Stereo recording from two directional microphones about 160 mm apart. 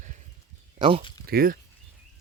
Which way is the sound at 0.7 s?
35° right (ahead or behind).